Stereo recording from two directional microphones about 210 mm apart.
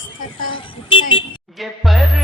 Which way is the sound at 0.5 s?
25° left (ahead or behind).